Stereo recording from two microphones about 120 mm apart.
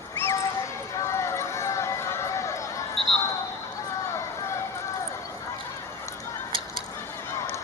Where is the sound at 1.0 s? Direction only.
25° left (ahead or behind).